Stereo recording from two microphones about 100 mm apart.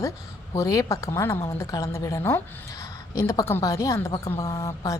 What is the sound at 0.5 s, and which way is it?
A woman's voice, 35° left (ahead or behind).